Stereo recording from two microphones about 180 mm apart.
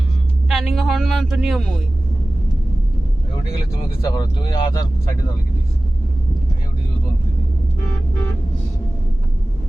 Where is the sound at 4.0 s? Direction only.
20° left (ahead or behind).